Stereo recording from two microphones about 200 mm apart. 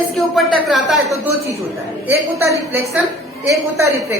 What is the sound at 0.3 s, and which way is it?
Speech, centre (ahead or behind).